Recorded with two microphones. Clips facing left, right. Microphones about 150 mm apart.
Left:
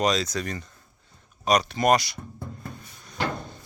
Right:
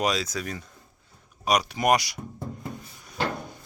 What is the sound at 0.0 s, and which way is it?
Speech, 5° right (ahead or behind).